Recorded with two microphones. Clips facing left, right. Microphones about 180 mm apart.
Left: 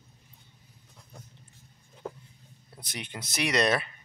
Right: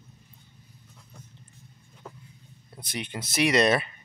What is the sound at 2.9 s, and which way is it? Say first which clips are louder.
Speech: right 5 dB; centre (ahead or behind).